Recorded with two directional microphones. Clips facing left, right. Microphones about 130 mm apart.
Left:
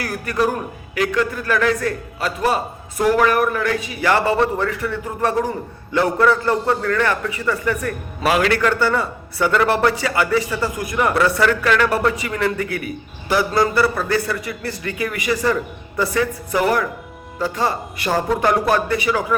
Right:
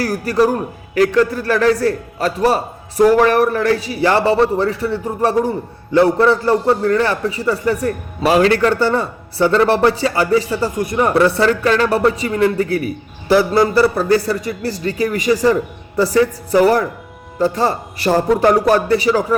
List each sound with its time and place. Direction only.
0.0 s a man's voice: 35° right (ahead or behind)